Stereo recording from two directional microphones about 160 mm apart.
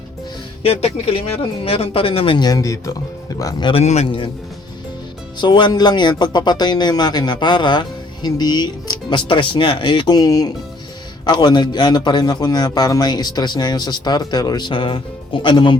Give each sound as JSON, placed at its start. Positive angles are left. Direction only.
{"t": 0.6, "sound": "speech", "side_deg": 40}
{"t": 3.7, "sound": "speech", "side_deg": 40}
{"t": 5.4, "sound": "speech", "side_deg": 30}